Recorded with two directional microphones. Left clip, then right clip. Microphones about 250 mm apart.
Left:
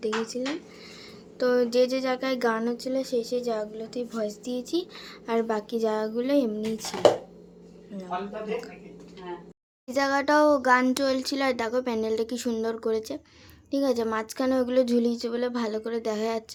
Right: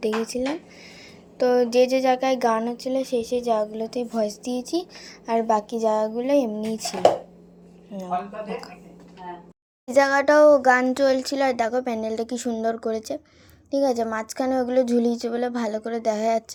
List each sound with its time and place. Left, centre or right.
0.0 s speech: centre
9.8 s speech: centre